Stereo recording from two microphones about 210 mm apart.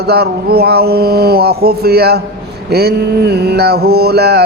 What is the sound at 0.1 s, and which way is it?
Mantra, 50° right (ahead or behind).